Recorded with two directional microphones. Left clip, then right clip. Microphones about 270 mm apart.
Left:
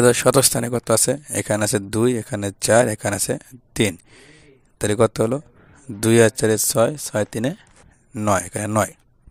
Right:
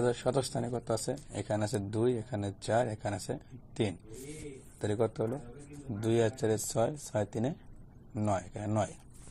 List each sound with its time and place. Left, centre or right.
0.0 s speech: left
6.4 s speech: left
8.1 s speech: left